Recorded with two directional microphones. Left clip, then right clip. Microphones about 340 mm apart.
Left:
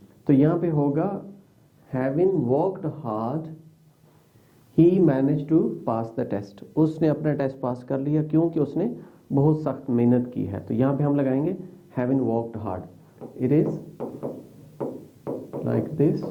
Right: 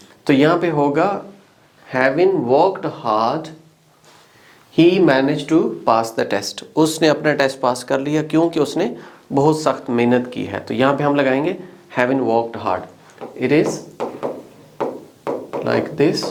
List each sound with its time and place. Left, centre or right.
0.3 s speech: centre
4.7 s speech: centre